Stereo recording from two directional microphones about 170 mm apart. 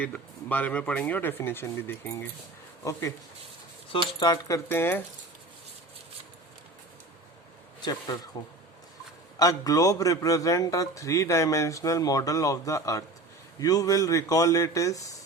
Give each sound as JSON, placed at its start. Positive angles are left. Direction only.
{"t": 0.0, "sound": "speech", "side_deg": 10}
{"t": 4.2, "sound": "speech", "side_deg": 20}
{"t": 7.8, "sound": "speech", "side_deg": 25}
{"t": 9.4, "sound": "a man's voice", "side_deg": 20}